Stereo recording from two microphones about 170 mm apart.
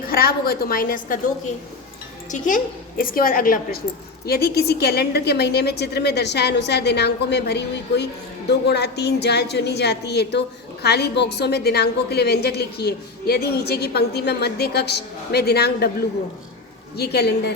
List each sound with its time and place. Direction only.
0.1 s a woman's voice: 65° left (ahead or behind)
2.3 s a woman's voice: 45° left (ahead or behind)
3.0 s a woman's voice: 55° left (ahead or behind)
4.3 s a woman's voice: 65° left (ahead or behind)
17.0 s a woman's voice: 70° left (ahead or behind)